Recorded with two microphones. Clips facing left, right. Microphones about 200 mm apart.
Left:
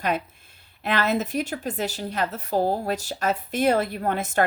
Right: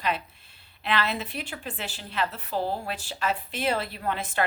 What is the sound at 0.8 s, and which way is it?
A woman's voice, 45° left (ahead or behind).